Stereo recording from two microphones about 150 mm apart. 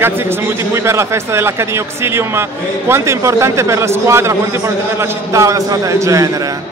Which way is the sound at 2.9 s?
20° right (ahead or behind).